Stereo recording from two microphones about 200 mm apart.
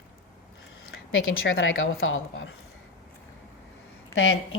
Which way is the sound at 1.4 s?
75° left (ahead or behind).